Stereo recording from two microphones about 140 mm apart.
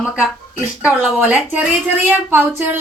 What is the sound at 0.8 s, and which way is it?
Speech, 10° right (ahead or behind).